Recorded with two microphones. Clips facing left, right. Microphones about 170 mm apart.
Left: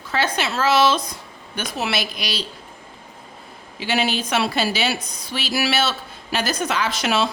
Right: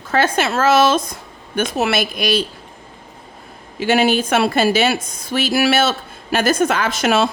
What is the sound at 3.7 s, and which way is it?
Speech, 50° right (ahead or behind).